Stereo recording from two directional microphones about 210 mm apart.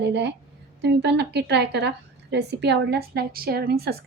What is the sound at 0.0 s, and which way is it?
A woman's voice, 55° right (ahead or behind).